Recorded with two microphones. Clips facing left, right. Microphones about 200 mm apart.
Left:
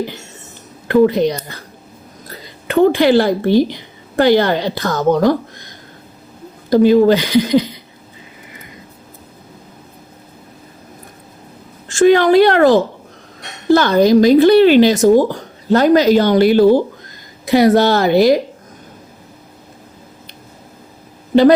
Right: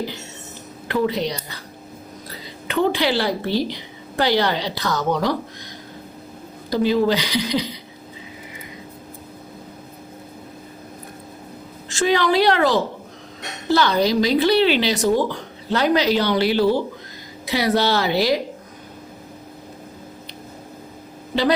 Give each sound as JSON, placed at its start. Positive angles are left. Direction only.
{"t": 0.9, "sound": "a woman's voice", "side_deg": 50}
{"t": 6.7, "sound": "speech", "side_deg": 50}
{"t": 11.9, "sound": "speech", "side_deg": 50}